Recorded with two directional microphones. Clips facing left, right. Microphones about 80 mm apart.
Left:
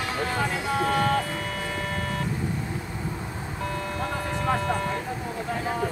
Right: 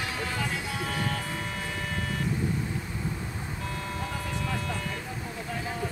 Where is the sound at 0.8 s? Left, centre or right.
Left.